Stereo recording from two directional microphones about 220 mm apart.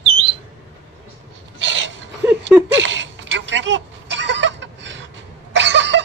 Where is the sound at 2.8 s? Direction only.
55° right (ahead or behind).